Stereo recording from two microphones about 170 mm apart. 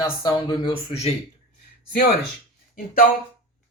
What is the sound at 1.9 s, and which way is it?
Speech, 70° left (ahead or behind).